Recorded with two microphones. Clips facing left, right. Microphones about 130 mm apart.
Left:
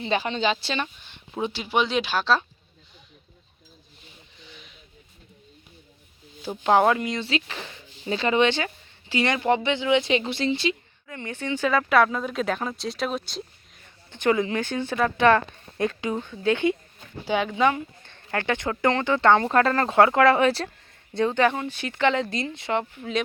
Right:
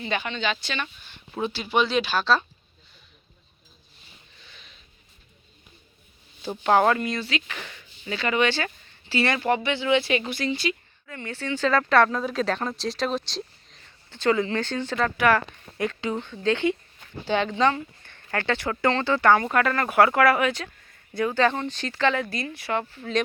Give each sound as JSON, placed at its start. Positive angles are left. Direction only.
{"t": 0.0, "sound": "speech", "side_deg": 30}
{"t": 1.3, "sound": "speech", "side_deg": 15}
{"t": 4.4, "sound": "a sound", "side_deg": 15}
{"t": 6.4, "sound": "speech", "side_deg": 15}
{"t": 7.2, "sound": "speech", "side_deg": 30}
{"t": 13.8, "sound": "speech", "side_deg": 15}
{"t": 15.2, "sound": "speech", "side_deg": 25}
{"t": 17.7, "sound": "speech", "side_deg": 20}
{"t": 21.4, "sound": "speech", "side_deg": 10}